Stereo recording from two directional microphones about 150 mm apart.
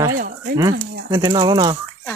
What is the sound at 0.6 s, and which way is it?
Speech, 25° right (ahead or behind).